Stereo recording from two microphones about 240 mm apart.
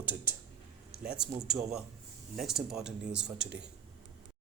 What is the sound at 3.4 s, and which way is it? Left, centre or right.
Speech, right.